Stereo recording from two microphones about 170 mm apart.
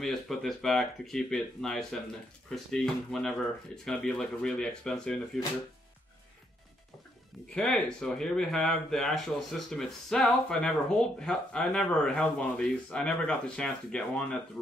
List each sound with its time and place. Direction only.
0.0 s speech: centre (ahead or behind)
7.5 s speech: 5° left (ahead or behind)